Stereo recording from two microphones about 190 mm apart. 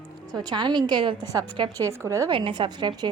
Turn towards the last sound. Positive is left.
turn(degrees=-20)  # may be behind; listen again after turning